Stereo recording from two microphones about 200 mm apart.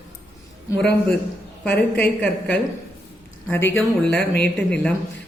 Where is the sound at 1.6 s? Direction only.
5° left (ahead or behind).